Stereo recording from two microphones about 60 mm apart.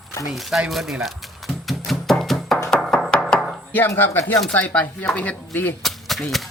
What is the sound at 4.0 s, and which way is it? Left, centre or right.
Speech, left.